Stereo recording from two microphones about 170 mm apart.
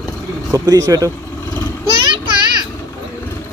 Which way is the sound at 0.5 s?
20° right (ahead or behind).